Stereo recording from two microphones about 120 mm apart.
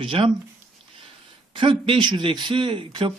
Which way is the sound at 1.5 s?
45° right (ahead or behind).